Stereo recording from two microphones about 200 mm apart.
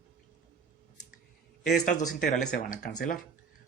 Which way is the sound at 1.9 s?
40° left (ahead or behind).